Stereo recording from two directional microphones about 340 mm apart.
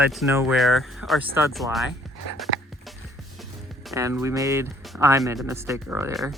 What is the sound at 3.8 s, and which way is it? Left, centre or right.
Speech, centre.